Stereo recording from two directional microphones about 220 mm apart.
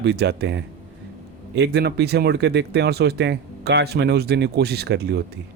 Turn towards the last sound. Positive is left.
turn(degrees=-50)  # may be behind; listen again after turning